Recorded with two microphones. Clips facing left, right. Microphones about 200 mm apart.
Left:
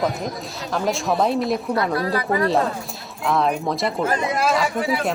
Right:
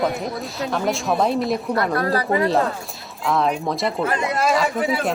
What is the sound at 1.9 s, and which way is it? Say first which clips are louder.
Speech: right 1 dB; 50° right (ahead or behind).